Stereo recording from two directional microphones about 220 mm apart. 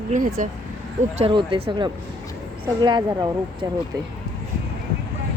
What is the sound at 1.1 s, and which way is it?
Speech, 25° right (ahead or behind).